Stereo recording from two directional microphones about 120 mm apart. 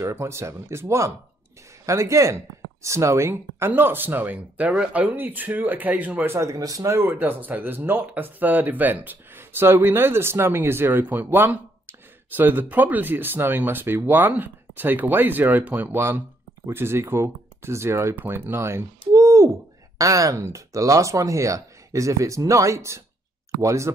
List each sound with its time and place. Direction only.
0.0 s speech: 25° right (ahead or behind)